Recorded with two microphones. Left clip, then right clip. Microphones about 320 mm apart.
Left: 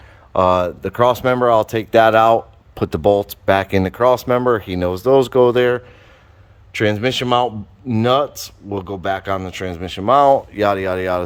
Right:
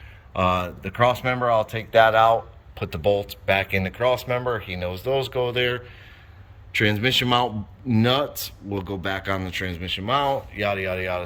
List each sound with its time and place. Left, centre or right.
0.3 s a man's voice: centre